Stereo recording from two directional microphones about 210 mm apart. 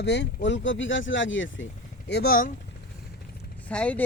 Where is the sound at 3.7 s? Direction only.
5° left (ahead or behind).